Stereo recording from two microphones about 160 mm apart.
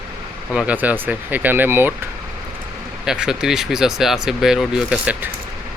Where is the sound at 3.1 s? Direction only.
5° right (ahead or behind).